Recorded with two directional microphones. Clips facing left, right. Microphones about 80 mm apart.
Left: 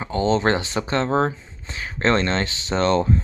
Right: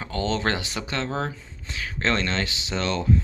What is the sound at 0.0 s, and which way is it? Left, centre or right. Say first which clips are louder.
Speech: left 6 dB; left.